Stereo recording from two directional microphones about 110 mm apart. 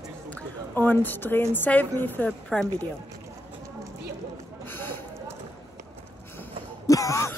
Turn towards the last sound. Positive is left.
turn(degrees=25)  # may be behind; listen again after turning